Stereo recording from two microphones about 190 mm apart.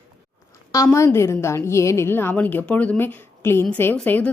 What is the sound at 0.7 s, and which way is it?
A woman's voice, 15° left (ahead or behind).